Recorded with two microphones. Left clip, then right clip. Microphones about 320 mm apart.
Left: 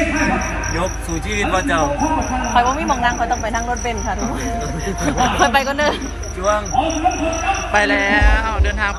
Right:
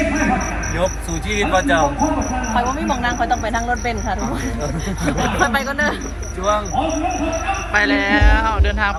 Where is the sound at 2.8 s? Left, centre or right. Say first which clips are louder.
Left 1 dB; centre.